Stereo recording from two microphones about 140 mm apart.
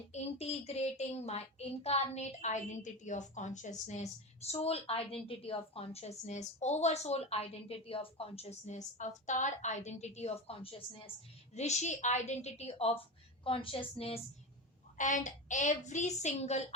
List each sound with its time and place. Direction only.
0.1 s a woman's voice: 50° left (ahead or behind)
11.5 s a woman's voice: 55° left (ahead or behind)
14.9 s a woman's voice: 65° left (ahead or behind)